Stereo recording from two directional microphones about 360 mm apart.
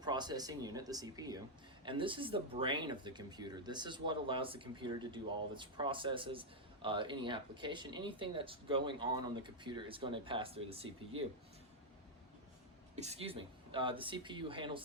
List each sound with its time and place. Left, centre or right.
0.0 s speech: centre
13.0 s speech: centre